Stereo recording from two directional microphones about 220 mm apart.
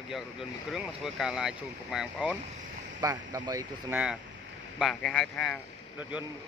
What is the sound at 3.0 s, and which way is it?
Speech, 15° right (ahead or behind).